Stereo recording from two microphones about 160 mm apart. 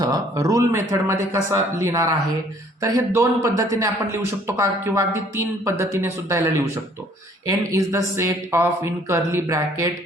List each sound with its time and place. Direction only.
0.0 s a man's voice: 20° right (ahead or behind)